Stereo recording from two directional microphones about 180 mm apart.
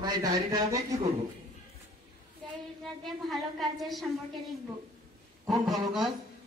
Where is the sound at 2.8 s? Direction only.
Centre (ahead or behind).